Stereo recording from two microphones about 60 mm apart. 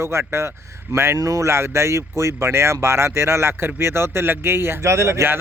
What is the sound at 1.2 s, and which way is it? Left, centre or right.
Speech, right.